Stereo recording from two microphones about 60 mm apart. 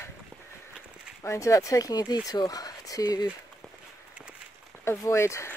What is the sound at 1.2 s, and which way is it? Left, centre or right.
Speech, left.